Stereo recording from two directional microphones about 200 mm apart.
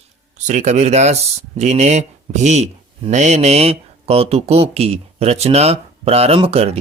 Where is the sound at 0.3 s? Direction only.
35° right (ahead or behind).